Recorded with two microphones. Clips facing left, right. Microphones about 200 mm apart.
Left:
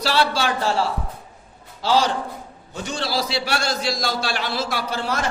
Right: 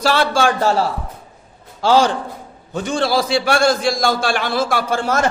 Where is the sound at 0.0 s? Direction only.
50° right (ahead or behind).